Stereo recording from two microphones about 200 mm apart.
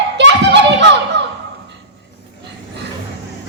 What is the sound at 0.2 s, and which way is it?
Children playing, 60° right (ahead or behind).